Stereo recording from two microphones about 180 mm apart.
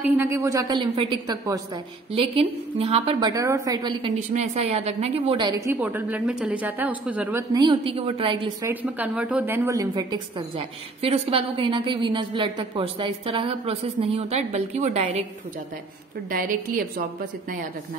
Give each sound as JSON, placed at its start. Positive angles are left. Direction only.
{"t": 0.0, "sound": "a woman's voice", "side_deg": -10}
{"t": 2.1, "sound": "a woman's voice", "side_deg": -30}
{"t": 4.3, "sound": "a woman's voice", "side_deg": -35}
{"t": 5.7, "sound": "a woman's voice", "side_deg": -10}
{"t": 7.5, "sound": "a woman's voice", "side_deg": -30}
{"t": 8.6, "sound": "a woman's voice", "side_deg": -10}
{"t": 11.0, "sound": "a woman's voice", "side_deg": -30}
{"t": 16.3, "sound": "a woman's voice", "side_deg": -50}